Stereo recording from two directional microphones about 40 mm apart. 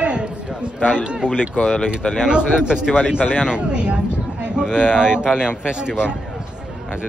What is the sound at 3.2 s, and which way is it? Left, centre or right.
Speech, left.